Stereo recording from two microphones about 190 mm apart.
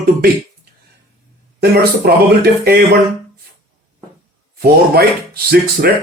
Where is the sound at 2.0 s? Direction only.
55° right (ahead or behind).